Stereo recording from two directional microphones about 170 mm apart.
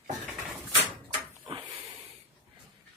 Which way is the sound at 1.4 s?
30° right (ahead or behind).